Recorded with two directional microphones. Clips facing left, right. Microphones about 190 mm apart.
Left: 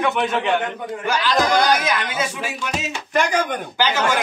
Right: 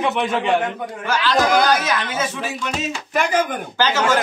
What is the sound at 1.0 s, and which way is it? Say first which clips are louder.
Speech: right 1 dB; 15° left (ahead or behind).